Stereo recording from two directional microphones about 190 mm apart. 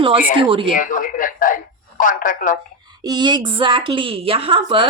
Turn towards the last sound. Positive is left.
turn(degrees=-25)  # may be behind; listen again after turning